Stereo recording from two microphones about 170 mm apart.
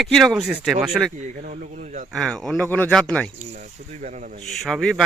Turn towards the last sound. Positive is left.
turn(degrees=5)  # may be behind; listen again after turning